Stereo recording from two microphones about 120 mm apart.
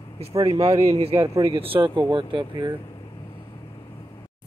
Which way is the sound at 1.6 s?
45° right (ahead or behind).